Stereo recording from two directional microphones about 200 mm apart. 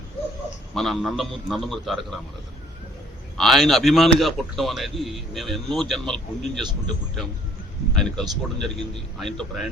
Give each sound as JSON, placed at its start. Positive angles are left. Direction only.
{"t": 0.7, "sound": "a man's voice", "side_deg": 0}
{"t": 3.3, "sound": "a man's voice", "side_deg": 0}
{"t": 7.9, "sound": "a man's voice", "side_deg": 5}